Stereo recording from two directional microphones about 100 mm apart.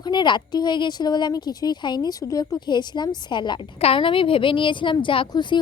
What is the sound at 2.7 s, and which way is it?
Speech, 45° left (ahead or behind).